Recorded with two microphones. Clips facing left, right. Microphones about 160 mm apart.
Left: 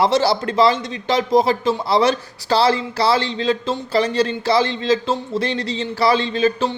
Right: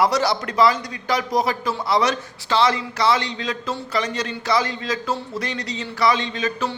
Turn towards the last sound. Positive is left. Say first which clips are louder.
# left 6 dB
turn(degrees=30)  # may be behind; listen again after turning